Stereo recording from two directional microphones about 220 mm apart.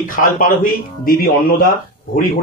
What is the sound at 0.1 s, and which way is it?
Speech, 40° left (ahead or behind).